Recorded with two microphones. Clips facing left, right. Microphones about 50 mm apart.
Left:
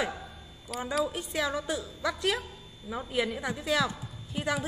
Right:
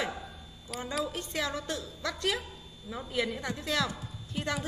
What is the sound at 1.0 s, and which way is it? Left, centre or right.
A woman's voice, centre.